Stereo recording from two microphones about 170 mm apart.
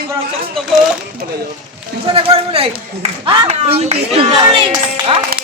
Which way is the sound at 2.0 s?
35° right (ahead or behind).